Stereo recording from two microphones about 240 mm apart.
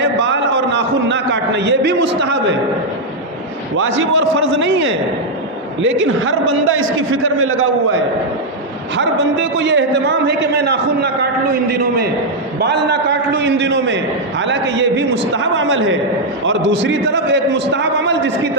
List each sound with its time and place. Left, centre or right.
0.0 s a sound: right
2.0 s a man's voice: right
3.8 s a man's voice: right